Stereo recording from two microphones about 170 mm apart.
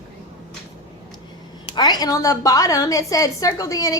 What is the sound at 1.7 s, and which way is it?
A woman's voice, 25° left (ahead or behind).